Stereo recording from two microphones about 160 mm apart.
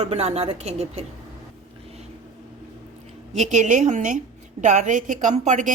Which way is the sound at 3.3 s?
50° right (ahead or behind).